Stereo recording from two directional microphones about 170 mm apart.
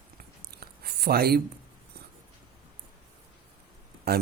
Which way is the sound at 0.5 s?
65° right (ahead or behind).